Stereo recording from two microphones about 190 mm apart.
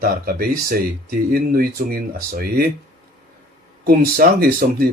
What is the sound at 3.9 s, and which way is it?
Speech, 50° right (ahead or behind).